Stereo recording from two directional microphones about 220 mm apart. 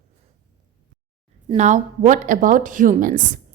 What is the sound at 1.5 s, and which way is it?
A woman's voice, 35° right (ahead or behind).